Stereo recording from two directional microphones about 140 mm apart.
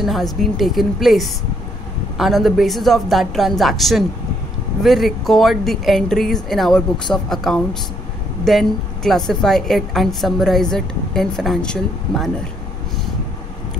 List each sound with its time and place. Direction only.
0.0 s a woman's voice: centre (ahead or behind)